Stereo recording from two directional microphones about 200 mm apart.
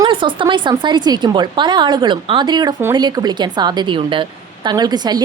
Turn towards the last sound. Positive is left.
turn(degrees=-20)  # may be behind; listen again after turning